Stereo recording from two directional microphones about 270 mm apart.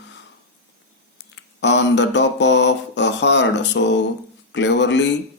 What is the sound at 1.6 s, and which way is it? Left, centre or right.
Speech, left.